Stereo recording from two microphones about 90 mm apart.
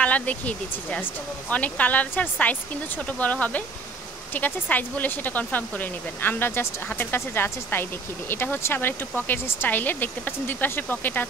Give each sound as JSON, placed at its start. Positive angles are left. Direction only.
{"t": 0.0, "sound": "speech", "side_deg": 15}